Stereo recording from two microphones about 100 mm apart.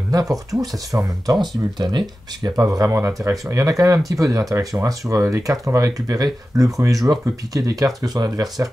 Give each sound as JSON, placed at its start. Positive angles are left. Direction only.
{"t": 0.1, "sound": "speech", "side_deg": -35}
{"t": 2.7, "sound": "speech", "side_deg": -30}